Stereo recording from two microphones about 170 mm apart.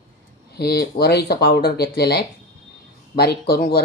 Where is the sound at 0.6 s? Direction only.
70° left (ahead or behind).